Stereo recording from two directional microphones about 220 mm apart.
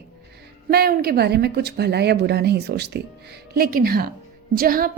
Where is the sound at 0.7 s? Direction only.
45° right (ahead or behind).